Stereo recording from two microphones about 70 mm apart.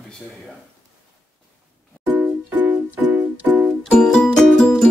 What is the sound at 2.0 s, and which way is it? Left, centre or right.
Music, right.